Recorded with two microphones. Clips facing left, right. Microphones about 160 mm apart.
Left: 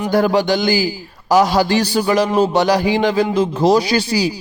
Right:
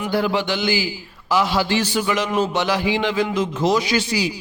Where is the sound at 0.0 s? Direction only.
40° left (ahead or behind).